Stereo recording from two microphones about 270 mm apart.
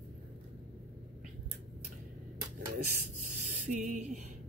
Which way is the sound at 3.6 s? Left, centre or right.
Right.